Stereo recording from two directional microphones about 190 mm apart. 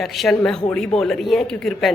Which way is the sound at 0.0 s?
Centre (ahead or behind).